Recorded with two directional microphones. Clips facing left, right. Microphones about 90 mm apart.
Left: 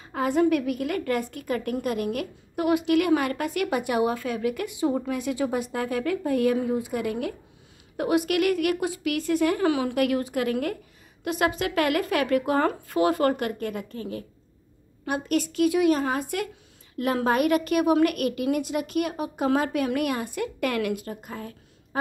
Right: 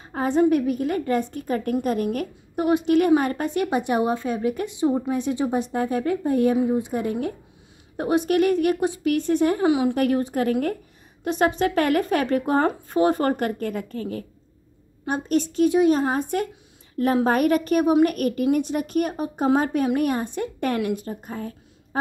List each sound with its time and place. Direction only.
0.0 s a woman's voice: 35° right (ahead or behind)
9.7 s a woman's voice: 20° right (ahead or behind)
9.9 s a woman's voice: 35° right (ahead or behind)
15.0 s a woman's voice: 30° right (ahead or behind)